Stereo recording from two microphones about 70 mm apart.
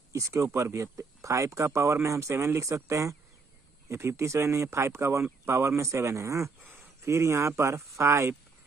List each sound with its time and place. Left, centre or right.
0.1 s speech: right